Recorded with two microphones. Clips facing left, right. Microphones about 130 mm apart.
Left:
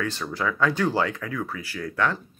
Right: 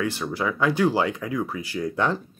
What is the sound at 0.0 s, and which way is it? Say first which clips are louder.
Speech: right 2 dB; 15° right (ahead or behind).